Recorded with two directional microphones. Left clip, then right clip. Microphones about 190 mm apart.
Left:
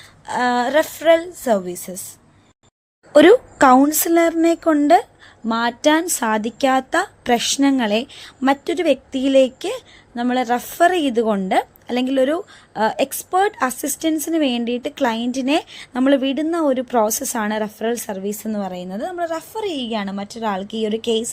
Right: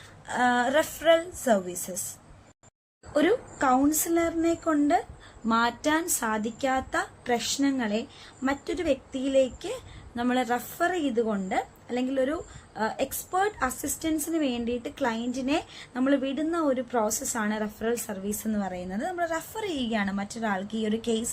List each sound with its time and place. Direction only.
0.3 s a woman's voice: 35° left (ahead or behind)
3.1 s a woman's voice: 50° left (ahead or behind)
5.5 s a woman's voice: 35° left (ahead or behind)